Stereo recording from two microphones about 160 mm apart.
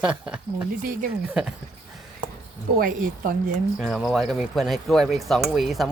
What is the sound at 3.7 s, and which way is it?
Speech, centre (ahead or behind).